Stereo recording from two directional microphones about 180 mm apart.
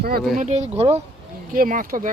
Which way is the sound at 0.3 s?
40° right (ahead or behind).